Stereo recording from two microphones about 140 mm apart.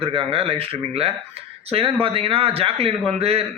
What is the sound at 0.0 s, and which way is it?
A man's voice, 40° right (ahead or behind).